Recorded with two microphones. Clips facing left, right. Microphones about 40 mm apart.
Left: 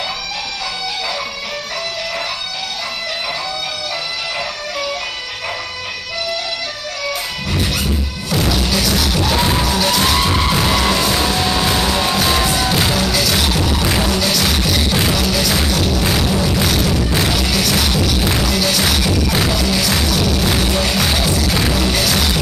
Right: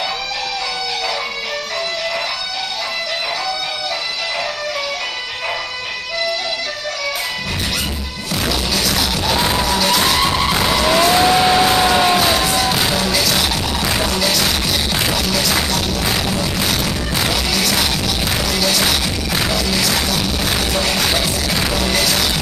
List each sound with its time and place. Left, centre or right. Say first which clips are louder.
8.3 s music: left 2 dB; centre
11.0 s music: right 4 dB; centre
12.3 s music: even; centre